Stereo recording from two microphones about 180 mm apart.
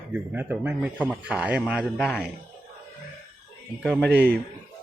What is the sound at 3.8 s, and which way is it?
Speech, 5° left (ahead or behind).